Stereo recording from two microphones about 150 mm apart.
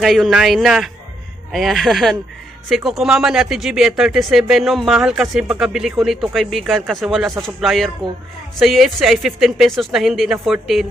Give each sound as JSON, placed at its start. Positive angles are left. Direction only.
{"t": 0.0, "sound": "speech", "side_deg": 0}